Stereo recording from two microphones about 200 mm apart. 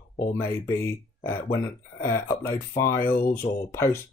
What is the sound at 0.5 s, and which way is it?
Speech, 10° left (ahead or behind).